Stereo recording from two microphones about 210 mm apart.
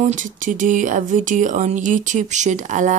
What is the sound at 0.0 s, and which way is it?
Speech, 40° right (ahead or behind).